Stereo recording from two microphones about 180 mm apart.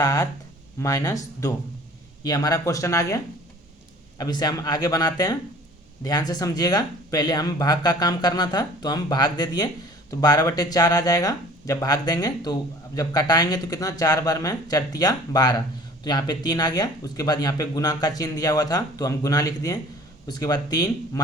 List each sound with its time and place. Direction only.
0.0 s speech: 20° left (ahead or behind)
4.2 s speech: 20° left (ahead or behind)